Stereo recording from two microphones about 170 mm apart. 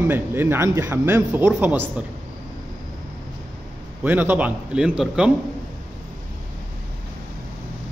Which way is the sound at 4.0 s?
10° right (ahead or behind).